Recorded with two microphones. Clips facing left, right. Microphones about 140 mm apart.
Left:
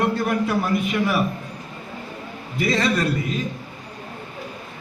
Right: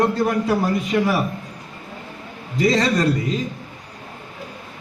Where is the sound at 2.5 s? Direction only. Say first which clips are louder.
Right 3 dB; 40° right (ahead or behind).